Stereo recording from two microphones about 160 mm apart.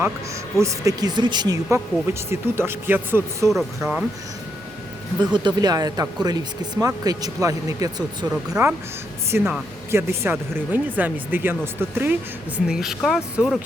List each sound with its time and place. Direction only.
0.6 s speech: 20° right (ahead or behind)
2.3 s speech: 15° right (ahead or behind)
3.5 s speech: centre (ahead or behind)
5.3 s speech: 30° right (ahead or behind)
8.3 s speech: 5° right (ahead or behind)